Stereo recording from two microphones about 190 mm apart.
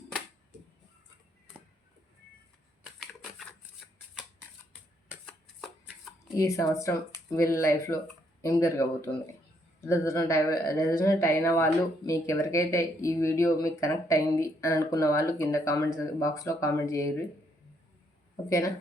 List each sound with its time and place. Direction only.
2.8 s a sound: centre (ahead or behind)
4.1 s shuffling cards: 5° right (ahead or behind)
6.3 s speech: 15° left (ahead or behind)
18.4 s speech: 15° left (ahead or behind)